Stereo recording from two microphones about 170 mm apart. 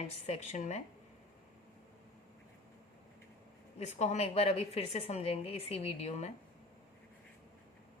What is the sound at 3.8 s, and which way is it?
Speech, 40° left (ahead or behind).